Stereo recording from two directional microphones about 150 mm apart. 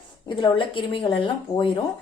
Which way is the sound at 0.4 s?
35° left (ahead or behind).